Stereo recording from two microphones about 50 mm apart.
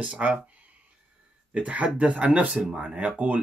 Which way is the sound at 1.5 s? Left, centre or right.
Right.